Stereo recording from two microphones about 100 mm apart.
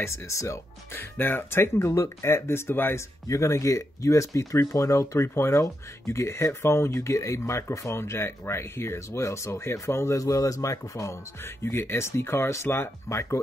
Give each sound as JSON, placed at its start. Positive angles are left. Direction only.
{"t": 0.0, "sound": "speech", "side_deg": 30}